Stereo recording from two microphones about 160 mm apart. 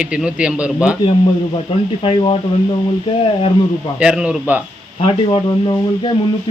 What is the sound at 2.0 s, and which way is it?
Speech, 35° left (ahead or behind).